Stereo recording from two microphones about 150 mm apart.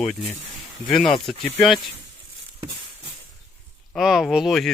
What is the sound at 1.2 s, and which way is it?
Speech, centre (ahead or behind).